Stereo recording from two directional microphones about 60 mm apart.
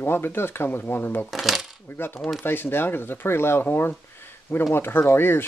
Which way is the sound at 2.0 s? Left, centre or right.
Left.